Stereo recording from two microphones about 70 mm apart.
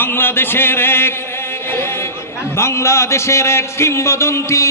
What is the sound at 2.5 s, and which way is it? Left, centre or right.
A man's voice, left.